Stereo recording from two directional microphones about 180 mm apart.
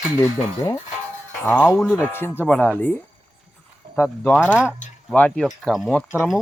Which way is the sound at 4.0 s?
10° left (ahead or behind).